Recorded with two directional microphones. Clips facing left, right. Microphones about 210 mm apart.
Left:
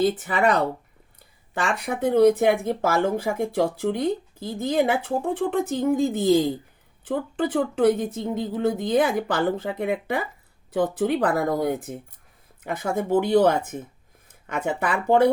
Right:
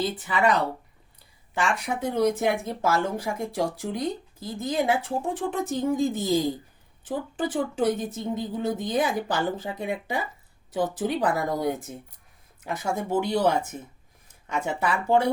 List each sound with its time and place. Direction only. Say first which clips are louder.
0.0 s speech: left 4 dB; 50° left (ahead or behind)
1.5 s speech: left 1 dB; 55° left (ahead or behind)